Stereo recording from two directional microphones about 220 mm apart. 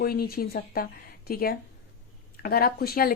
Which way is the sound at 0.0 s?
45° left (ahead or behind).